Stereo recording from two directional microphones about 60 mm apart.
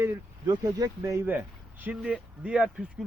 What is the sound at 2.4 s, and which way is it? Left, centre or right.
Speech, centre.